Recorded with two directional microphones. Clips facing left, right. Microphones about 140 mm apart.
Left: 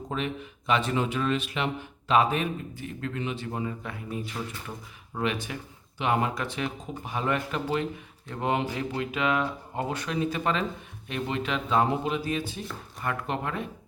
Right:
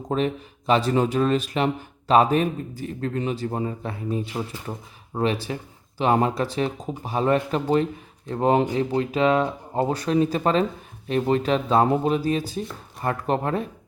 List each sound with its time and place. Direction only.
0.1 s speech: 35° right (ahead or behind)